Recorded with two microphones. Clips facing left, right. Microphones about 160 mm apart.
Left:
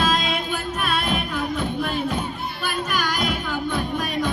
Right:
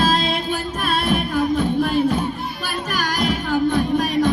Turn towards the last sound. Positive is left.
turn(degrees=-45)  # may be behind; listen again after turning